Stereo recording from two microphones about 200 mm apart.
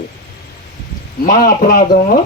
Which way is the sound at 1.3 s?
45° left (ahead or behind).